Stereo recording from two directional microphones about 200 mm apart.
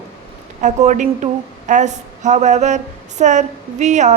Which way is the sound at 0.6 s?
35° right (ahead or behind).